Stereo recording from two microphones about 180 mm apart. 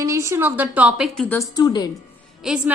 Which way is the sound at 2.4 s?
5° right (ahead or behind).